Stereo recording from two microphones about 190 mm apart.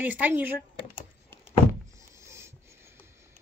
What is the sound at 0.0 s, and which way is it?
Speech, 10° right (ahead or behind).